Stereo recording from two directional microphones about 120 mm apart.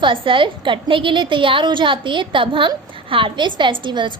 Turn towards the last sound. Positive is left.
turn(degrees=-40)  # may be behind; listen again after turning